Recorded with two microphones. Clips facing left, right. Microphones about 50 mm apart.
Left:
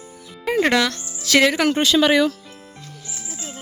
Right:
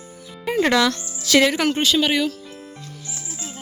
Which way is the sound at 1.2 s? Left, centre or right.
Left.